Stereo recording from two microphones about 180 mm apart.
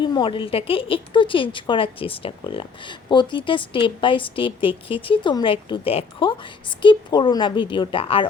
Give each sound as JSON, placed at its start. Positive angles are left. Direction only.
{"t": 0.0, "sound": "speech", "side_deg": 25}